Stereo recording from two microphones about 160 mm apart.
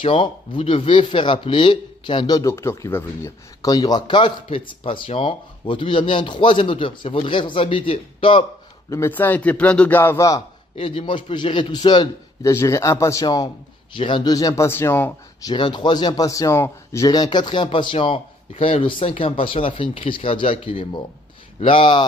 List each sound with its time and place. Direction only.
0.0 s a man's voice: 30° left (ahead or behind)
8.9 s a man's voice: 15° left (ahead or behind)
10.8 s speech: 35° left (ahead or behind); by 15.5 s 15° left (ahead or behind)
15.5 s a man's voice: 30° left (ahead or behind)